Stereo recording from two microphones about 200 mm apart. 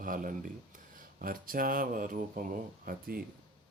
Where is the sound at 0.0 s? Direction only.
45° right (ahead or behind).